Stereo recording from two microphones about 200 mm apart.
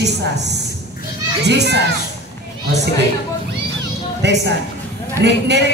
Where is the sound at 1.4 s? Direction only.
60° right (ahead or behind).